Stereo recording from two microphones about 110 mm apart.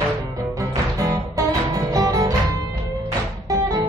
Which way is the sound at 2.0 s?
30° right (ahead or behind).